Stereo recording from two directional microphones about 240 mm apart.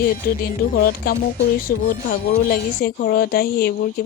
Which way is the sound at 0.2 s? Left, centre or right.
Left.